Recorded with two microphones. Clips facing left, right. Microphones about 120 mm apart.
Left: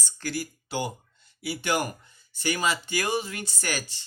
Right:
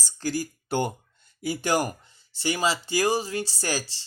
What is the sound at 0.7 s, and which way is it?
Speech, 55° right (ahead or behind).